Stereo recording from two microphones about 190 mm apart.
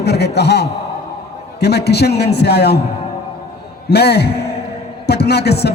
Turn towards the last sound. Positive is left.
turn(degrees=60)  # may be behind; listen again after turning